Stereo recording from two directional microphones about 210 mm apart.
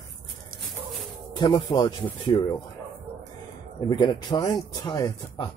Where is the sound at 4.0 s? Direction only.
20° left (ahead or behind).